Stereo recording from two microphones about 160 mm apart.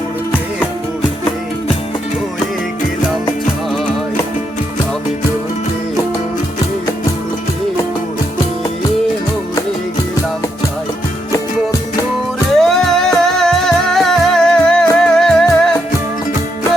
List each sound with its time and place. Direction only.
12.5 s music: centre (ahead or behind)